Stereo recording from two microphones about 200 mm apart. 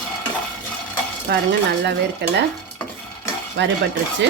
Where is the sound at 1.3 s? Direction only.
55° right (ahead or behind).